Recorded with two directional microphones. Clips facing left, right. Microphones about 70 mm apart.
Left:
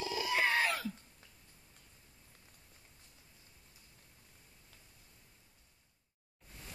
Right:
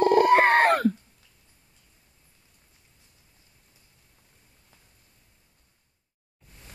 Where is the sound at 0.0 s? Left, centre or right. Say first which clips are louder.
Right 16 dB; right.